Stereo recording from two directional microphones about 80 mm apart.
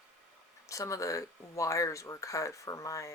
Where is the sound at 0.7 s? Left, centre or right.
Left.